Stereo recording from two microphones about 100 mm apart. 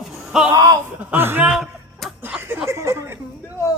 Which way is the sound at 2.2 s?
15° right (ahead or behind).